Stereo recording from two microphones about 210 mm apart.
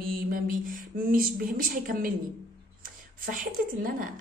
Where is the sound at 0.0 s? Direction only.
45° right (ahead or behind).